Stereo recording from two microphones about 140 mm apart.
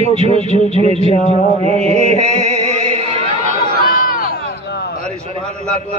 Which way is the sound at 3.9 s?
85° left.